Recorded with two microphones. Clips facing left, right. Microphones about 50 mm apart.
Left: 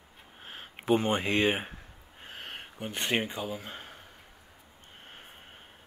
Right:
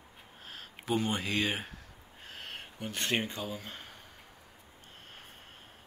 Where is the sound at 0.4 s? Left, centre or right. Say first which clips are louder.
Left 3 dB; left.